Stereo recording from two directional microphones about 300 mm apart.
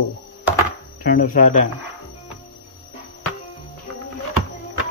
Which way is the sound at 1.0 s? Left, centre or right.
Left.